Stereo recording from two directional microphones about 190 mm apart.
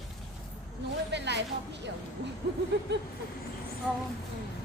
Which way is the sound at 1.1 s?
65° right (ahead or behind).